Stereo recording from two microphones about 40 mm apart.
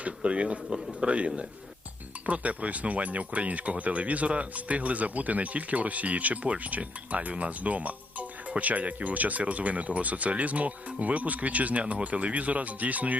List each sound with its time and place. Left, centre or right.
0.0 s speech: right